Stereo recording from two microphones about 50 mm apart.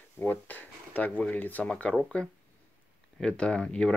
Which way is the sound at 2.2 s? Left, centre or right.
Left.